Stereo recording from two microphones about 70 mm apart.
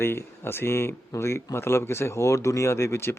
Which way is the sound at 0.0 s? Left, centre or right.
Left.